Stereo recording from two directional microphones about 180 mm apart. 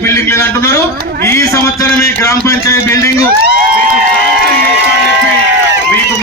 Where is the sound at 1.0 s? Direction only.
55° right (ahead or behind).